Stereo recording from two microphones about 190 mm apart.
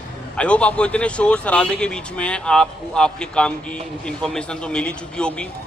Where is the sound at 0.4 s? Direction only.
5° left (ahead or behind).